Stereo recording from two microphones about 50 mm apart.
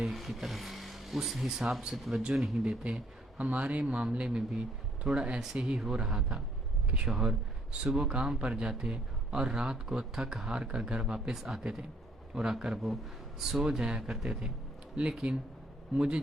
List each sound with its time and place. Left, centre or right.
0.0 s speech: centre
2.6 s speech: right